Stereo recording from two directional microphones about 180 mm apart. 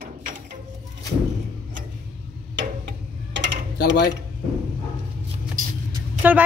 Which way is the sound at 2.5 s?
85° right.